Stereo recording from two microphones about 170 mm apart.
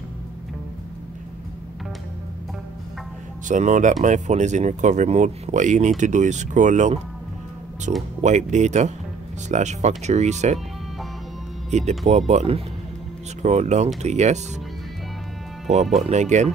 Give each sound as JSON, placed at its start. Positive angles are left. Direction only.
{"t": 3.4, "sound": "speech", "side_deg": -45}
{"t": 11.7, "sound": "speech", "side_deg": -40}
{"t": 16.0, "sound": "speech", "side_deg": -45}